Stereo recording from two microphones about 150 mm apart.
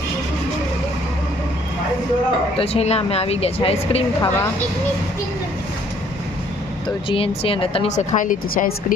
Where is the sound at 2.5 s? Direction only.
40° left (ahead or behind).